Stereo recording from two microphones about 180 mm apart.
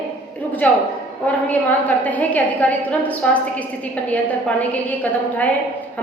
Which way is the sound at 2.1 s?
10° left (ahead or behind).